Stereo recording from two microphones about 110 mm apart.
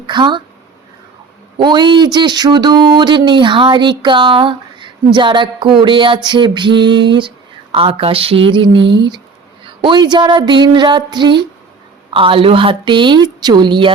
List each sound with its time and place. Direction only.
0.1 s speech: 45° right (ahead or behind)
1.5 s speech: 45° right (ahead or behind)